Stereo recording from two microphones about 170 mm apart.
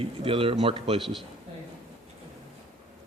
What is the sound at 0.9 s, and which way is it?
Speech, centre (ahead or behind).